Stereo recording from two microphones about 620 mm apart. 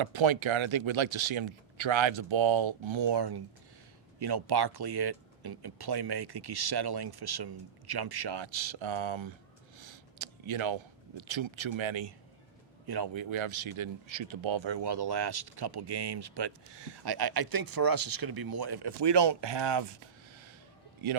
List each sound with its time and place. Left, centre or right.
0.0 s speech: right
21.0 s speech: right